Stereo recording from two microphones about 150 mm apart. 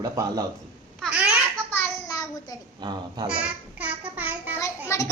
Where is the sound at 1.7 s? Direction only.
20° left (ahead or behind).